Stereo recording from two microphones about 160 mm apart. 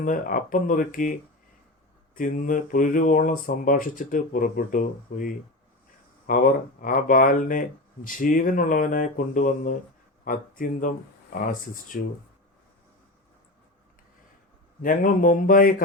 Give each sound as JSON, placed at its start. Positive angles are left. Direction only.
{"t": 0.0, "sound": "speech", "side_deg": 60}
{"t": 14.8, "sound": "speech", "side_deg": 60}